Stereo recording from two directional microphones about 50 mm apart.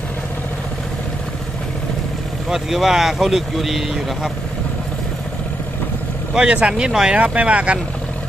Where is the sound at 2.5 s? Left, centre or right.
Centre.